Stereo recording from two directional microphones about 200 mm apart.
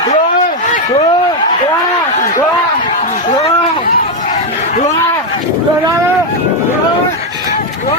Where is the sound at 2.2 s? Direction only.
40° left (ahead or behind).